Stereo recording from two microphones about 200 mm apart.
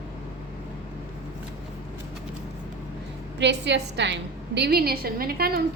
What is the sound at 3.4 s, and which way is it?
A woman's voice, 60° right (ahead or behind).